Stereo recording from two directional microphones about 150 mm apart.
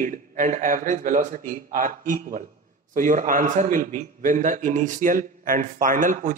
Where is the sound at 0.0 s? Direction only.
60° right (ahead or behind).